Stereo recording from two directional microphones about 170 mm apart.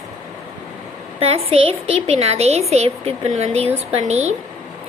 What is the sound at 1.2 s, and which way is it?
A woman's voice, 35° right (ahead or behind).